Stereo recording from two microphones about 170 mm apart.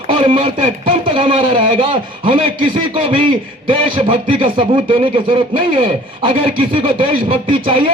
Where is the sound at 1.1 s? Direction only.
30° right (ahead or behind).